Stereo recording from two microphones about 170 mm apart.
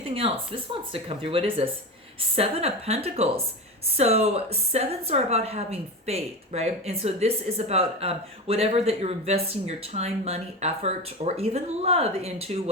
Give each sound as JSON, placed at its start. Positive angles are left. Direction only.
{"t": 0.1, "sound": "a woman's voice", "side_deg": -35}